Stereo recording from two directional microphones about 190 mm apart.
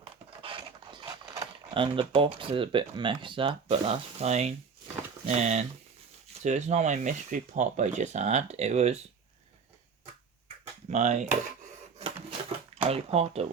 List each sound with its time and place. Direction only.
0.0 s speech: 30° right (ahead or behind)
10.8 s speech: 35° right (ahead or behind)
12.8 s speech: 30° right (ahead or behind)